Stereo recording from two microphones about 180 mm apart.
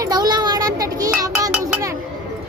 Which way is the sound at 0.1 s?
20° right (ahead or behind).